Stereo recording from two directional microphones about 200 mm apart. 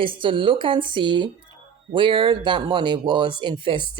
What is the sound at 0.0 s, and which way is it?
Speech, 25° right (ahead or behind).